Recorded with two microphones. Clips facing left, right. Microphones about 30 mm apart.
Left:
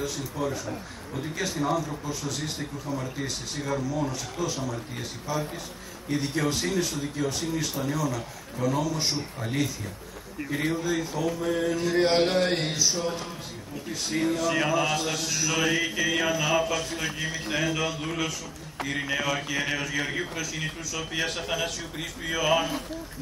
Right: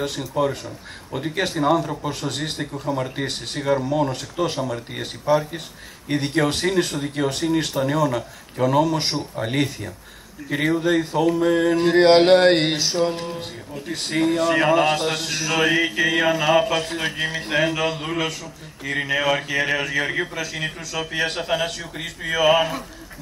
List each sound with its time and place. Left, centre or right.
0.0 s a man's voice: right